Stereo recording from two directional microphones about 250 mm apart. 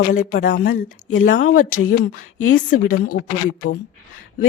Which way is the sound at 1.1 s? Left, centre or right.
Left.